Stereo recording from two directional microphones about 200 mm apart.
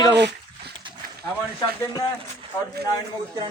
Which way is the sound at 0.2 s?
55° right (ahead or behind).